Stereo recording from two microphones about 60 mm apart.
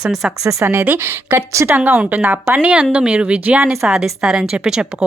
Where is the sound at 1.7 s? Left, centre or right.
Right.